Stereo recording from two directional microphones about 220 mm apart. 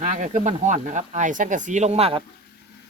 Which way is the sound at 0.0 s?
35° right (ahead or behind).